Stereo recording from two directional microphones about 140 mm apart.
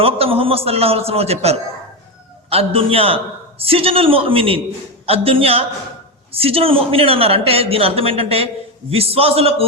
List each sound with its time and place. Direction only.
0.0 s speech: 40° right (ahead or behind)